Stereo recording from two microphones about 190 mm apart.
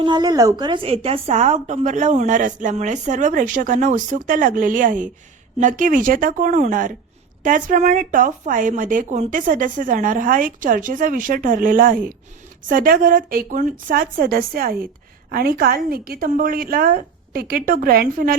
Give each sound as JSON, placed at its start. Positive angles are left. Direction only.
{"t": 0.0, "sound": "a woman's voice", "side_deg": -20}